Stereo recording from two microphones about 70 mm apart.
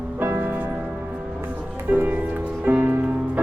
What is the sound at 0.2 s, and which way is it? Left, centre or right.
Music, right.